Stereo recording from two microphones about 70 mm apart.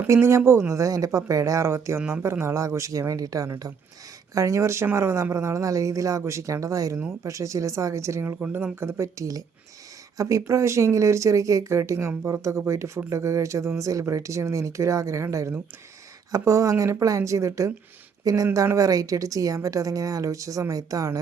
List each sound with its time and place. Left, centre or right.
0.1 s speech: right
0.7 s speech: right
8.4 s a woman's voice: right